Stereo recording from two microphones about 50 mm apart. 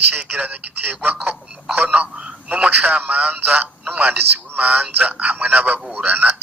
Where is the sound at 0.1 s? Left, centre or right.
Right.